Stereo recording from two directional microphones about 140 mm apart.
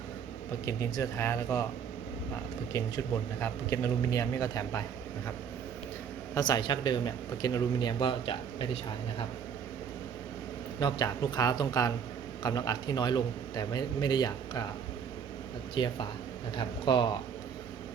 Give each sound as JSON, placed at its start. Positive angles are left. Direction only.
{"t": 0.6, "sound": "a man's voice", "side_deg": 25}
{"t": 2.7, "sound": "a man's voice", "side_deg": 25}
{"t": 6.3, "sound": "speech", "side_deg": 30}
{"t": 10.8, "sound": "a man's voice", "side_deg": 30}
{"t": 15.7, "sound": "speech", "side_deg": 35}